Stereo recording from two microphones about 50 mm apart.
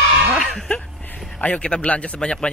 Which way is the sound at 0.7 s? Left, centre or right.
Left.